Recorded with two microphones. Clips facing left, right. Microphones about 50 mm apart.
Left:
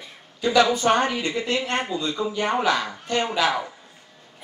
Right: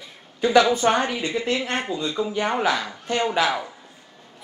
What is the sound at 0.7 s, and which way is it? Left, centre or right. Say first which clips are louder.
Speech: even; right.